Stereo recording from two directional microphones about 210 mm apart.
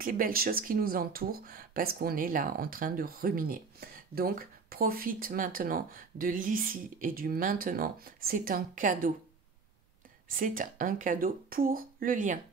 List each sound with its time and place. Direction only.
0.0 s speech: 40° right (ahead or behind)
10.2 s speech: 40° right (ahead or behind)